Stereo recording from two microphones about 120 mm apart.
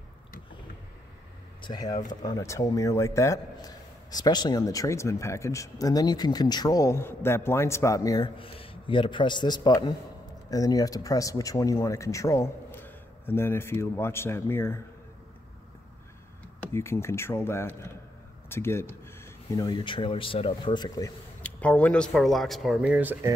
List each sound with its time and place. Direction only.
1.6 s a man's voice: 35° left (ahead or behind)
8.4 s a man's voice: 50° left (ahead or behind); by 14.8 s 20° left (ahead or behind)
16.7 s a man's voice: 20° left (ahead or behind)
19.5 s speech: 35° left (ahead or behind)
21.4 s speech: 10° left (ahead or behind); by 23.1 s 10° right (ahead or behind)